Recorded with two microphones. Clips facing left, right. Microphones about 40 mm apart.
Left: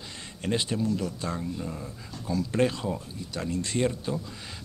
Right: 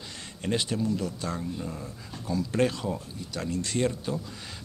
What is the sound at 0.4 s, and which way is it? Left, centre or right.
A man's voice, centre.